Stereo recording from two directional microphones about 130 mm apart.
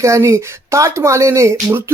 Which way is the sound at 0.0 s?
25° right (ahead or behind).